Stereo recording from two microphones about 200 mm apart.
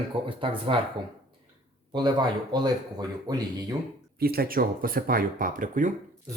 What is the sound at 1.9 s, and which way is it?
Speech, 20° right (ahead or behind).